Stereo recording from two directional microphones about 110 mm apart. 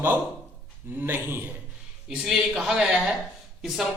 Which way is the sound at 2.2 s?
5° right (ahead or behind).